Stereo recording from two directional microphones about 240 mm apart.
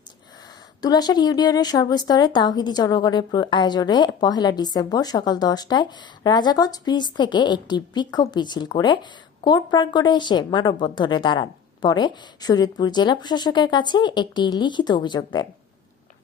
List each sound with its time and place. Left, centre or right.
0.8 s speech: centre